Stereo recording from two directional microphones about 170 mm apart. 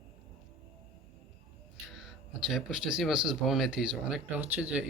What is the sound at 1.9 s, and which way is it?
Speech, centre (ahead or behind).